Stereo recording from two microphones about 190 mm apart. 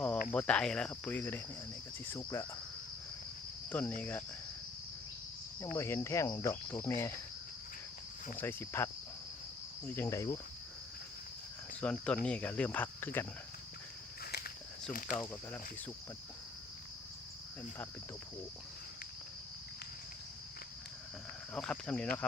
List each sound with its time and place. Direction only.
0.3 s cricket: 5° left (ahead or behind)
3.7 s speech: 10° left (ahead or behind)
5.5 s cricket: 15° left (ahead or behind)
8.4 s cricket: 10° left (ahead or behind)
11.7 s cricket: 5° left (ahead or behind)
14.3 s walk: 55° left (ahead or behind)
15.1 s cricket: 10° left (ahead or behind)
21.5 s speech: 5° left (ahead or behind)